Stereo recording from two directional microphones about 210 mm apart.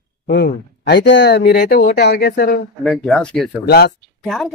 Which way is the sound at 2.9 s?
5° left (ahead or behind).